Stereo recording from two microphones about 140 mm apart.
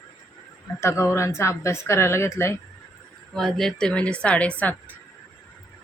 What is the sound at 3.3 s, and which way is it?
A woman's voice, centre (ahead or behind).